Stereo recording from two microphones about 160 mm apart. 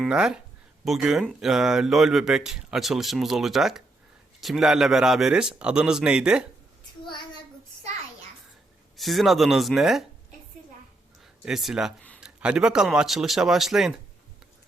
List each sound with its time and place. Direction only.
0.0 s speech: 5° right (ahead or behind)
7.0 s child singing: 30° left (ahead or behind)
9.0 s speech: centre (ahead or behind)
11.4 s speech: centre (ahead or behind)